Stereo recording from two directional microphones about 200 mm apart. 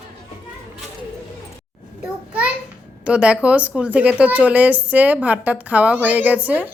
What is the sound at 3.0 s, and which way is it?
A woman's voice, 5° right (ahead or behind).